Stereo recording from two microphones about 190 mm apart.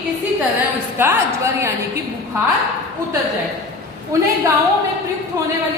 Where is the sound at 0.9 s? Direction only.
15° right (ahead or behind).